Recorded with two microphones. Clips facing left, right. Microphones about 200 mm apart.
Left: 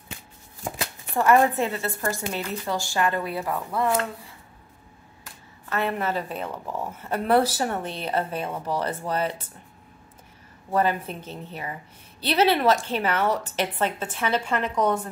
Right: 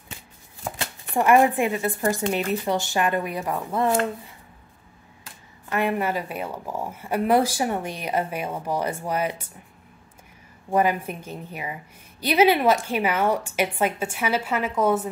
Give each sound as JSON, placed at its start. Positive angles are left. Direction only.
{"t": 1.1, "sound": "a woman's voice", "side_deg": -15}
{"t": 5.7, "sound": "a woman's voice", "side_deg": -15}
{"t": 10.7, "sound": "a woman's voice", "side_deg": -10}